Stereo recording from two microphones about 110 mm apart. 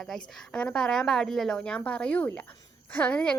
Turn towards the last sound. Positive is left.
turn(degrees=10)  # may be behind; listen again after turning